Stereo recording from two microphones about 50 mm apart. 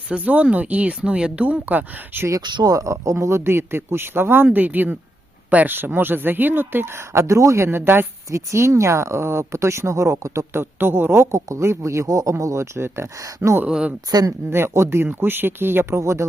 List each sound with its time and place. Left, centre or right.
0.1 s speech: right
1.6 s speech: right
2.2 s speech: right
5.7 s speech: right
7.7 s speech: right
8.3 s speech: right
10.5 s speech: right
13.7 s speech: centre
14.7 s speech: right
16.0 s speech: right